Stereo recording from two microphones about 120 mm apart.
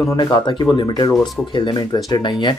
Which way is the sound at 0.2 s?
40° left (ahead or behind).